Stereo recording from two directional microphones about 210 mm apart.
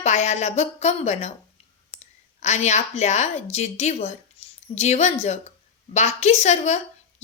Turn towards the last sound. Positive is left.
turn(degrees=35)  # may be behind; listen again after turning